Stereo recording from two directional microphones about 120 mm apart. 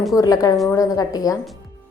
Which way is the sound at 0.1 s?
30° left (ahead or behind).